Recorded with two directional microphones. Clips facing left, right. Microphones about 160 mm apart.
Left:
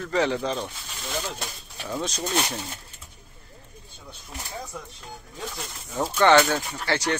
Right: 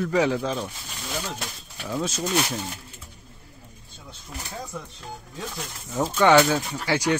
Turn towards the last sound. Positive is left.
turn(degrees=-10)  # may be behind; listen again after turning